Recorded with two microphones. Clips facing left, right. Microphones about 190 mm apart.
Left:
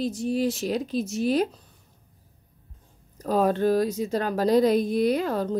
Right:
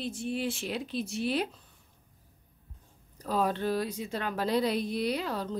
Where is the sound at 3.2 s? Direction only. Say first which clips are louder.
Left 7 dB; 45° left (ahead or behind).